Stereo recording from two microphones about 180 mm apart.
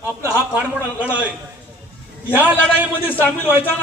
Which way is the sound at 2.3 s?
10° right (ahead or behind).